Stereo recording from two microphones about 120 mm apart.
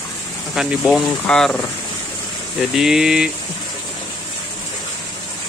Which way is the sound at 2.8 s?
5° right (ahead or behind).